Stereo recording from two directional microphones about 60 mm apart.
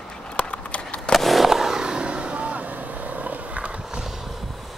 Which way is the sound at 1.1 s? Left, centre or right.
Centre.